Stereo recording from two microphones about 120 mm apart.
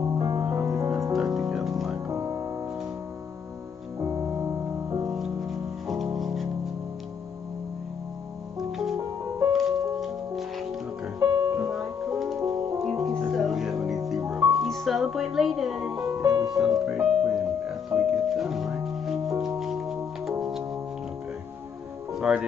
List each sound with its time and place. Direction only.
0.0 s music: 25° right (ahead or behind)
1.1 s music: centre (ahead or behind)
2.0 s music: 30° right (ahead or behind)
4.0 s music: 30° right (ahead or behind)
5.5 s music: centre (ahead or behind)
8.5 s music: centre (ahead or behind)
11.1 s music: 30° right (ahead or behind)
12.5 s music: 25° right (ahead or behind)
12.8 s music: centre (ahead or behind)
16.1 s music: 30° right (ahead or behind)
16.5 s music: centre (ahead or behind)
22.1 s music: 5° right (ahead or behind)